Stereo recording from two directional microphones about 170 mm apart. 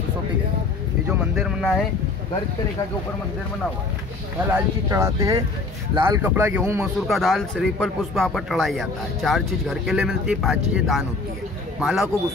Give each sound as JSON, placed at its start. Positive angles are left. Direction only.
{"t": 1.0, "sound": "a man's voice", "side_deg": -10}
{"t": 4.5, "sound": "speech", "side_deg": -15}
{"t": 7.1, "sound": "a man's voice", "side_deg": 0}